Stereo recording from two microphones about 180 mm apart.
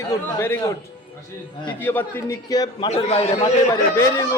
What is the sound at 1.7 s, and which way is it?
A man's voice, 10° left (ahead or behind).